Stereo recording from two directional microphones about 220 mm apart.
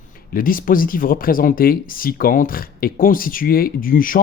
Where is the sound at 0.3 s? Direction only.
40° left (ahead or behind).